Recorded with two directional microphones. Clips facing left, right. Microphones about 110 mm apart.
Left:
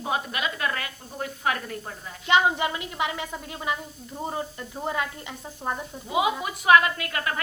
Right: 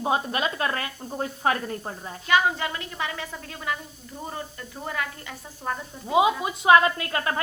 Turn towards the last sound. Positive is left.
turn(degrees=-30)  # may be behind; listen again after turning